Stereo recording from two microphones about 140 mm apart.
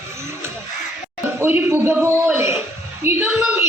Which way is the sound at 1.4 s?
15° right (ahead or behind).